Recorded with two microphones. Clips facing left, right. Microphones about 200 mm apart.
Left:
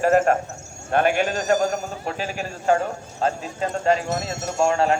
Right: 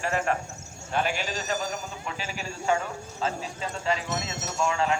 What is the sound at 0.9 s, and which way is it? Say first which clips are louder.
Speech: left 9 dB; 55° left (ahead or behind).